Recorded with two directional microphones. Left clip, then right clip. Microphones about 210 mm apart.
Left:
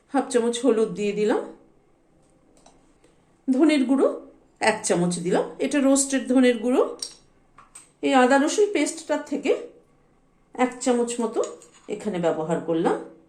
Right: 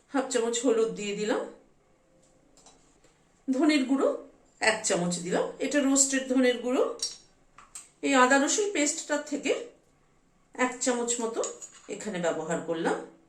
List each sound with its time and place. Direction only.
0.1 s speech: 45° left (ahead or behind)
3.5 s speech: 45° left (ahead or behind)
8.0 s a woman's voice: 40° left (ahead or behind)
10.5 s a woman's voice: 40° left (ahead or behind)